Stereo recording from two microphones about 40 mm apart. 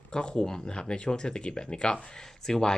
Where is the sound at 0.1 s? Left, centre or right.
Left.